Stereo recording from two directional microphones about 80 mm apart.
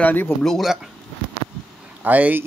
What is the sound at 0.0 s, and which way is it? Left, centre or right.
Speech, left.